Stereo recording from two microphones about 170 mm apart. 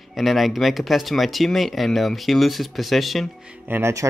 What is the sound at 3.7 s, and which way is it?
Speech, 15° right (ahead or behind).